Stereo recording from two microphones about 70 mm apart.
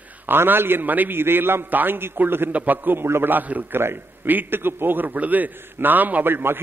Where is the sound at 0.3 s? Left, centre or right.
Right.